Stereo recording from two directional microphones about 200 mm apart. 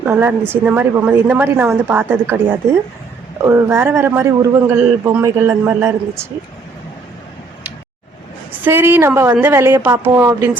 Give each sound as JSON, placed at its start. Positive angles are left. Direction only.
{"t": 0.0, "sound": "a man's voice", "side_deg": -10}
{"t": 8.5, "sound": "a man's voice", "side_deg": -10}